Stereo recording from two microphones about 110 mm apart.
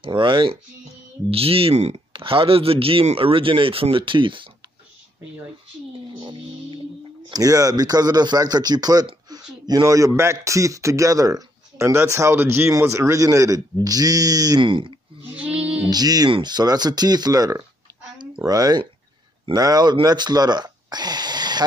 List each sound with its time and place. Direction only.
0.0 s speech: 50° right (ahead or behind)
1.3 s speech: 60° right (ahead or behind)
2.1 s speech: 55° right (ahead or behind)
7.2 s speech: 35° right (ahead or behind)
9.3 s a sound: 35° right (ahead or behind)
9.7 s speech: 35° right (ahead or behind)
14.6 s speech: 50° right (ahead or behind)
15.3 s child singing: 10° right (ahead or behind)
15.9 s speech: 35° right (ahead or behind)
18.1 s a sound: 40° right (ahead or behind)
19.5 s speech: 35° right (ahead or behind)